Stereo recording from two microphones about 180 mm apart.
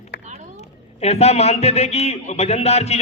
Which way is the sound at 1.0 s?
35° left (ahead or behind).